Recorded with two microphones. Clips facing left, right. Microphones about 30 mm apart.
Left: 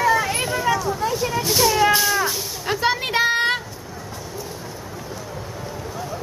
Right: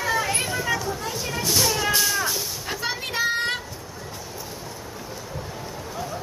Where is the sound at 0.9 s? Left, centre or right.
Centre.